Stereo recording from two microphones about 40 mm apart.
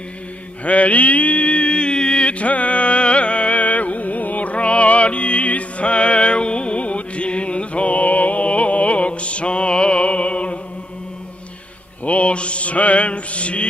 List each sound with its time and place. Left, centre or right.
0.7 s mantra: left
12.0 s mantra: left